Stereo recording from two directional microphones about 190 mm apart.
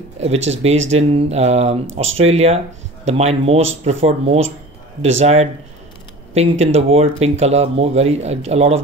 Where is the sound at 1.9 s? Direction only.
90° right.